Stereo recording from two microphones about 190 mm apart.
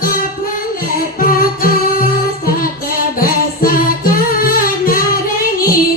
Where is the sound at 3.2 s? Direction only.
50° left (ahead or behind).